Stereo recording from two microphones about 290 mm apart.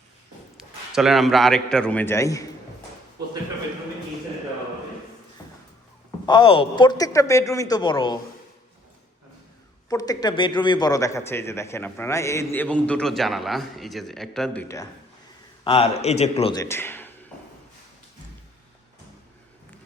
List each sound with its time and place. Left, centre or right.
0.5 s a man's voice: centre
6.2 s a man's voice: centre
9.9 s a man's voice: centre
15.6 s a man's voice: centre